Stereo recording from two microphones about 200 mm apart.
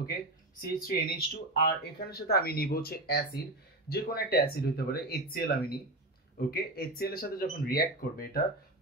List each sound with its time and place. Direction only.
0.6 s speech: 45° left (ahead or behind)